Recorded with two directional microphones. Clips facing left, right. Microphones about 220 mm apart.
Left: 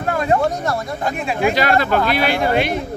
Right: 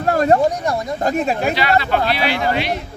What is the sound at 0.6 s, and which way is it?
Speech, 15° right (ahead or behind).